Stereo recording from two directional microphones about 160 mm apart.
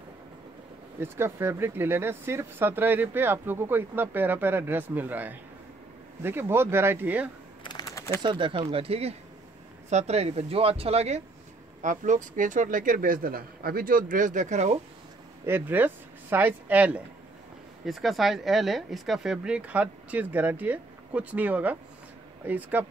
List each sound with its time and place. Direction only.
0.9 s speech: 15° right (ahead or behind)
7.6 s a sound: 25° left (ahead or behind)
8.2 s speech: 30° right (ahead or behind)
11.8 s speech: 50° right (ahead or behind)
15.4 s speech: 15° right (ahead or behind)